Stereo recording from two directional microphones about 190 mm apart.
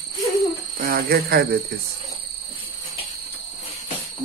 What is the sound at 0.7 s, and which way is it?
Speech, 50° right (ahead or behind).